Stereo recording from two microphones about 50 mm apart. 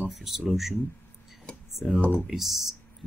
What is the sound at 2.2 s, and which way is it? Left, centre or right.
Speech, centre.